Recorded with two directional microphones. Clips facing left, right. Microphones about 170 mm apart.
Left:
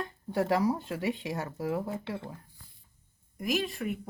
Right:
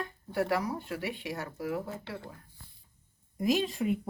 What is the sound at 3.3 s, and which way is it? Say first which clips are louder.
Speech: right 3 dB; 20° right (ahead or behind).